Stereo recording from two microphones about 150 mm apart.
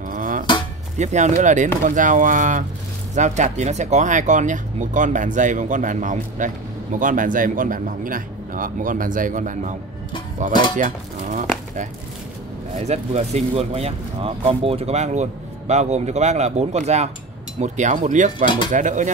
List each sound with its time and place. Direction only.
0.1 s dishes: 65° right (ahead or behind)
0.9 s speech: 50° right (ahead or behind)
18.4 s speech: 30° left (ahead or behind)
18.7 s speech: 55° right (ahead or behind)